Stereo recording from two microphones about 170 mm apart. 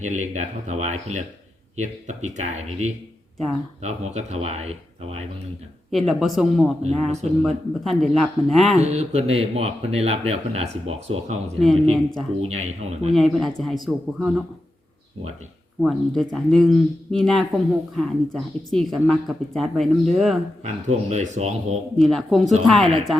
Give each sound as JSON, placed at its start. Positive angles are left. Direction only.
{"t": 0.0, "sound": "speech", "side_deg": -45}
{"t": 5.9, "sound": "speech", "side_deg": 0}
{"t": 7.1, "sound": "speech", "side_deg": -40}
{"t": 7.9, "sound": "speech", "side_deg": 0}
{"t": 8.8, "sound": "speech", "side_deg": -40}
{"t": 11.6, "sound": "speech", "side_deg": 0}
{"t": 12.5, "sound": "speech", "side_deg": -40}
{"t": 13.1, "sound": "speech", "side_deg": 0}
{"t": 15.8, "sound": "speech", "side_deg": 0}
{"t": 20.8, "sound": "speech", "side_deg": -40}
{"t": 21.9, "sound": "speech", "side_deg": 0}